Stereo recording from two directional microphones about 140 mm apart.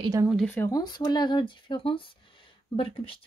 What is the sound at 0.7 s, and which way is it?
Speech, 30° left (ahead or behind).